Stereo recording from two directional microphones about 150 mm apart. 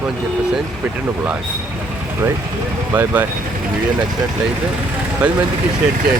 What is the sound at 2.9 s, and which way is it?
Speech, 10° right (ahead or behind).